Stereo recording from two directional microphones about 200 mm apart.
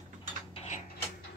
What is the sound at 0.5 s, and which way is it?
Mechanisms, 30° left (ahead or behind).